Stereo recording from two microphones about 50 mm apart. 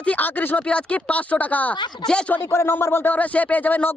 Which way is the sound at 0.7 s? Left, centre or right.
Left.